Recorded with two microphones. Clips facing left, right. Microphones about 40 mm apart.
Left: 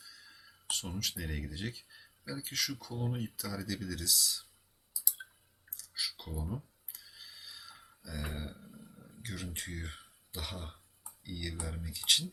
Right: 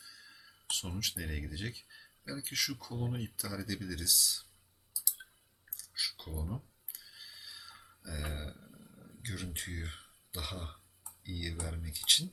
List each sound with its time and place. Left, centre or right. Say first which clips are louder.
0.0 s speech: even; centre
5.7 s clicking: even; centre
6.4 s a sound: left 1 dB; centre
9.2 s speech: even; centre